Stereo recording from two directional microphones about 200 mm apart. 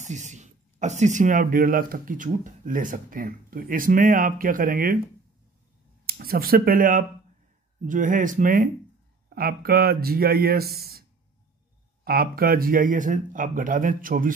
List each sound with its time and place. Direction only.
0.0 s speech: 35° right (ahead or behind)
6.0 s speech: 50° right (ahead or behind)